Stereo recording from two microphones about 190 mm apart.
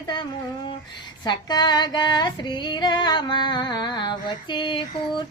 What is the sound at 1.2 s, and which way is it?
Female singing, 20° left (ahead or behind).